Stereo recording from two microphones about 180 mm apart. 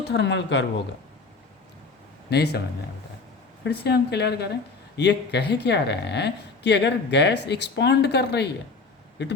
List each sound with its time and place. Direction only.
0.1 s speech: 80° left
2.3 s speech: 65° left (ahead or behind)
3.6 s a woman's voice: 65° left (ahead or behind)